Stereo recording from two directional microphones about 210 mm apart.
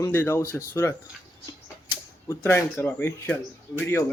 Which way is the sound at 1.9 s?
15° left (ahead or behind).